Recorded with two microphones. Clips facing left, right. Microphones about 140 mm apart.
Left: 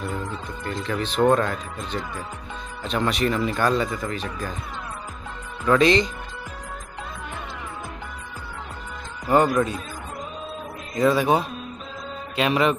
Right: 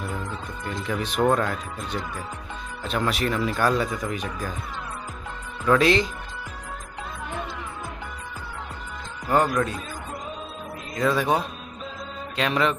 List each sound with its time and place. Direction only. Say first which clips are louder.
0.0 s speech: left 2 dB; 5° right (ahead or behind)
5.7 s speech: left 1 dB; 5° right (ahead or behind)
9.3 s speech: left 3 dB; centre (ahead or behind)
11.0 s speech: left 3 dB; centre (ahead or behind)